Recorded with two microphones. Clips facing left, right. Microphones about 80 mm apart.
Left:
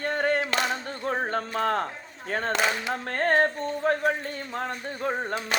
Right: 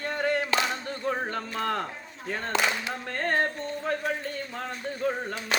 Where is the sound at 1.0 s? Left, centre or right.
Left.